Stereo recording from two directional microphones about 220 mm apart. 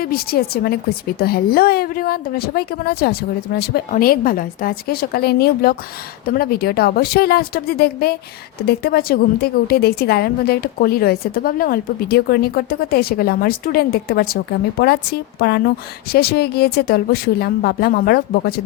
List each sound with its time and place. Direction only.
0.0 s a woman's voice: 45° left (ahead or behind)